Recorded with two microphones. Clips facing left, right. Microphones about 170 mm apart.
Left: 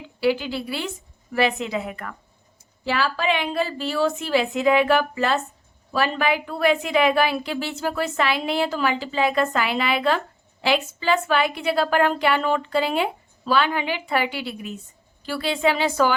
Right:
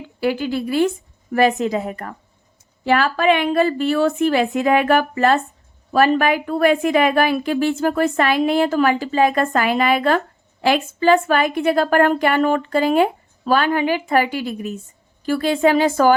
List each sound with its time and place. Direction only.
0.2 s a woman's voice: 50° right (ahead or behind)
2.8 s a woman's voice: 55° right (ahead or behind)